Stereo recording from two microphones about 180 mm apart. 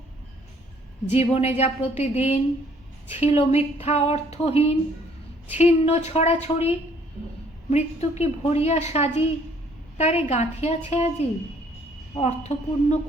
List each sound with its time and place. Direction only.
1.1 s speech: 35° left (ahead or behind)